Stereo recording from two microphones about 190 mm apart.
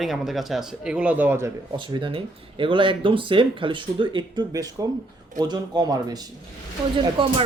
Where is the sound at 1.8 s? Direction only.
25° right (ahead or behind).